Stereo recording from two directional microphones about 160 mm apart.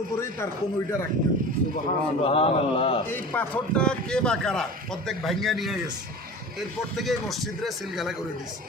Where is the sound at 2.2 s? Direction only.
40° left (ahead or behind).